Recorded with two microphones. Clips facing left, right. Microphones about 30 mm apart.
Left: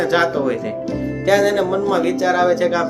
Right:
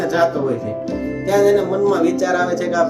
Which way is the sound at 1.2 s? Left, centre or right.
Left.